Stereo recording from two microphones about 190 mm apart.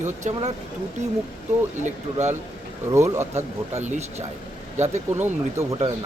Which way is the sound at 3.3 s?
35° right (ahead or behind).